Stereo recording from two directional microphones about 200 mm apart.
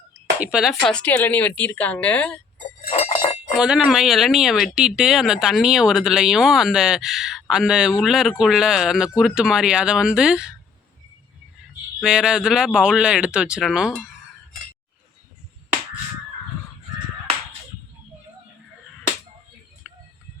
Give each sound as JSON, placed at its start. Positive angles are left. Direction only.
{"t": 0.3, "sound": "a woman's voice", "side_deg": -5}
{"t": 2.9, "sound": "cowbell", "side_deg": 30}
{"t": 3.5, "sound": "speech", "side_deg": -5}
{"t": 11.9, "sound": "speech", "side_deg": -5}
{"t": 19.9, "sound": "music", "side_deg": 0}